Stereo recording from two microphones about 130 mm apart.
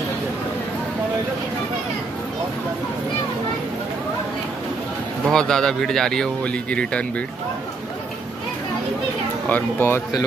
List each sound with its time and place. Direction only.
5.2 s speech: 5° left (ahead or behind)
9.5 s speech: 15° left (ahead or behind)